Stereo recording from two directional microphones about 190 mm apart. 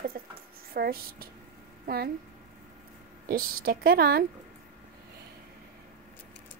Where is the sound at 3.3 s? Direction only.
50° right (ahead or behind).